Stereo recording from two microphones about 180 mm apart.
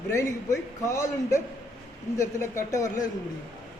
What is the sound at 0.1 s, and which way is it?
A woman's voice, 15° left (ahead or behind).